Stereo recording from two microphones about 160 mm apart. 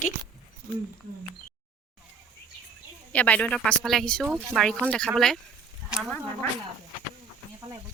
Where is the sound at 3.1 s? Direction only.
10° left (ahead or behind).